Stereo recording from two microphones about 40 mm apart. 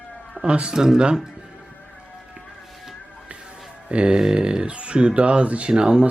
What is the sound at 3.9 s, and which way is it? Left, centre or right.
Speech, right.